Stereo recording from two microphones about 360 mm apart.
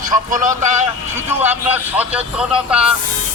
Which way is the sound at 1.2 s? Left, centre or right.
Centre.